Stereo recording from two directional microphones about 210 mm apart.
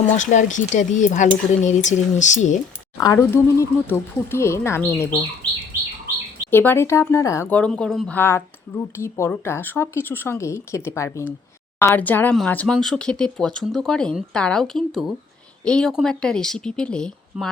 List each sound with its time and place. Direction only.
0.1 s speech: 35° left (ahead or behind)
3.0 s speech: 15° left (ahead or behind)
6.5 s speech: 10° left (ahead or behind)